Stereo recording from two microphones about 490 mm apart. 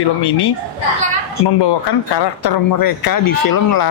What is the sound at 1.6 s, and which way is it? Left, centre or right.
Speech, left.